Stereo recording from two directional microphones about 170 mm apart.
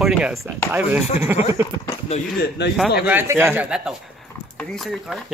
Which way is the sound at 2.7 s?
5° right (ahead or behind).